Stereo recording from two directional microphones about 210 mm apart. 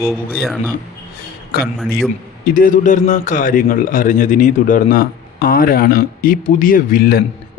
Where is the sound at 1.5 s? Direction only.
45° left (ahead or behind).